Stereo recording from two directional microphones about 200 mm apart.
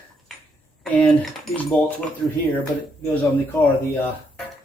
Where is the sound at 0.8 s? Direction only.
5° left (ahead or behind).